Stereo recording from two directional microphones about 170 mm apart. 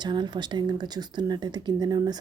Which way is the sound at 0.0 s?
25° right (ahead or behind).